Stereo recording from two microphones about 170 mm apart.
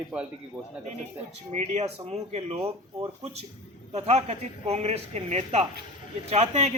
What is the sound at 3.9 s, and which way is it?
A man's voice, 40° right (ahead or behind).